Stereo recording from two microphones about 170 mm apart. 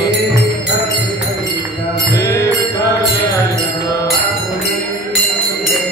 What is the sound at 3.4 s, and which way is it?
Music, 20° left (ahead or behind).